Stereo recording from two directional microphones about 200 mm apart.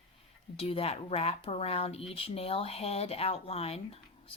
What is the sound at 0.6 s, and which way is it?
Speech, 30° left (ahead or behind).